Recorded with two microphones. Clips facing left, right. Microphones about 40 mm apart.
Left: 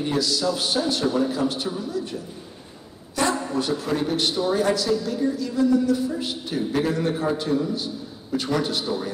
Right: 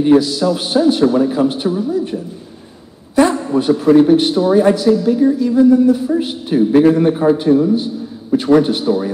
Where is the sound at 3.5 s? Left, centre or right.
Right.